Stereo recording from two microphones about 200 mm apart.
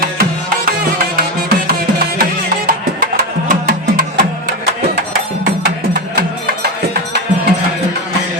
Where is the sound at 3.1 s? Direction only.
45° right (ahead or behind).